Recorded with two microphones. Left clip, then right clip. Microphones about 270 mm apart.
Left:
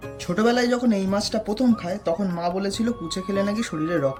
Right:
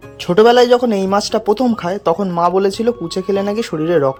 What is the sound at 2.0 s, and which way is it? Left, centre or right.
Speech, centre.